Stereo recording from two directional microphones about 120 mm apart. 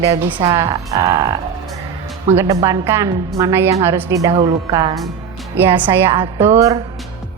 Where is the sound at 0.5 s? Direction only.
30° right (ahead or behind).